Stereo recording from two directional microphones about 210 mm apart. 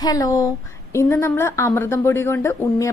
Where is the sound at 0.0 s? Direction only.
15° left (ahead or behind).